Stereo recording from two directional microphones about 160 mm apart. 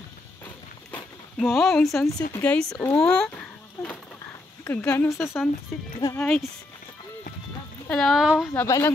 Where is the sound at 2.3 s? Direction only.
10° left (ahead or behind).